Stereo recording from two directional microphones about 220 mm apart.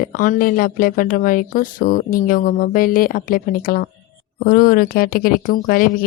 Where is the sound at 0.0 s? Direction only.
40° left (ahead or behind).